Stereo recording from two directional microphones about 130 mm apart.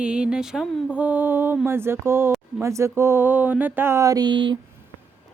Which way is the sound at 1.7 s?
20° right (ahead or behind).